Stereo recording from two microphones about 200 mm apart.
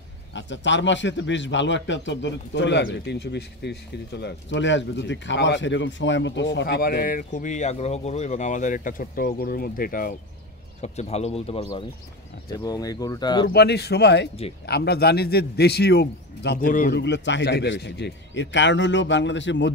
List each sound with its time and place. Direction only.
0.3 s a man's voice: 65° left (ahead or behind); by 10.1 s 45° left (ahead or behind)
10.8 s speech: 35° left (ahead or behind)
12.6 s speech: 20° left (ahead or behind)
13.5 s a man's voice: 55° left (ahead or behind)
17.0 s a man's voice: 60° left (ahead or behind)